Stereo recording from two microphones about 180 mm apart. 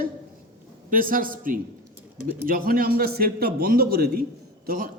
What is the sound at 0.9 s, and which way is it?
A man's voice, 50° right (ahead or behind).